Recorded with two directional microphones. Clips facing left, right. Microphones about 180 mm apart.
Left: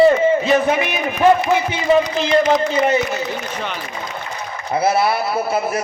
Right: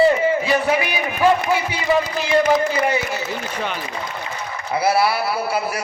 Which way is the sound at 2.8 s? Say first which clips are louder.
Left 4 dB; 20° left (ahead or behind).